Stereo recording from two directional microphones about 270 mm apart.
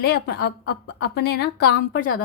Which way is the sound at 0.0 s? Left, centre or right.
Left.